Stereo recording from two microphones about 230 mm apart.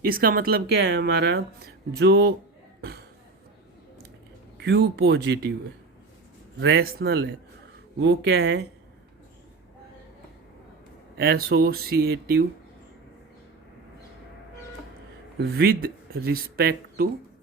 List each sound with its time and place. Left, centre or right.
0.0 s speech: right
4.6 s speech: right
6.6 s speech: right
11.2 s speech: right
15.4 s speech: right